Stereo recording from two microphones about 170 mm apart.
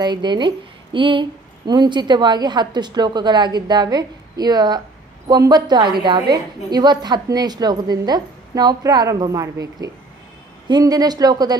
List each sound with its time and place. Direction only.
0.0 s a woman's voice: 25° right (ahead or behind)